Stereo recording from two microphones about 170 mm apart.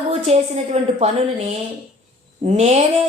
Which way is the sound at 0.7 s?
40° right (ahead or behind).